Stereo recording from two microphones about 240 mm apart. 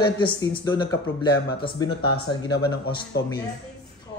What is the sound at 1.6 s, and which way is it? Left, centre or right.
Speech, left.